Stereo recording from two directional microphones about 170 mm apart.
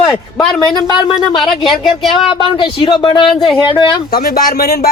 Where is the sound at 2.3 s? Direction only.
30° left (ahead or behind).